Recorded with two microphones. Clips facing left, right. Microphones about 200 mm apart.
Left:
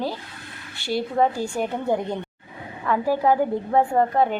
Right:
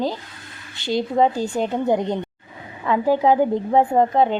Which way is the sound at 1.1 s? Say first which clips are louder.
Right 3 dB; 20° right (ahead or behind).